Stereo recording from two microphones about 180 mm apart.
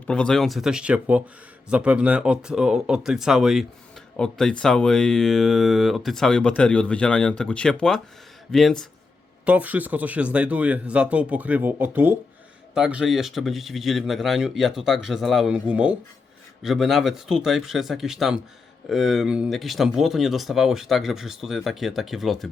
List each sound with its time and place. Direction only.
0.1 s speech: 5° left (ahead or behind)
9.5 s speech: 10° right (ahead or behind)